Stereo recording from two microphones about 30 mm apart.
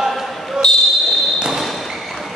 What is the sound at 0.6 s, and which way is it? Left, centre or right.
Basketball bounce, centre.